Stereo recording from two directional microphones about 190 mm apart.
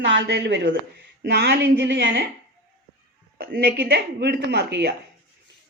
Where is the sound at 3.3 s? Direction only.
55° right (ahead or behind).